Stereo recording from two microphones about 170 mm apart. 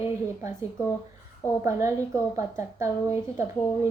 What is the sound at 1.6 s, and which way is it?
A woman's voice, 15° right (ahead or behind).